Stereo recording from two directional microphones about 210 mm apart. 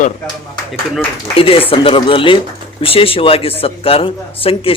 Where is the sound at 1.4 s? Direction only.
25° left (ahead or behind).